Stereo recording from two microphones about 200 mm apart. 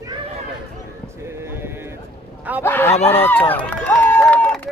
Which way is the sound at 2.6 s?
10° left (ahead or behind).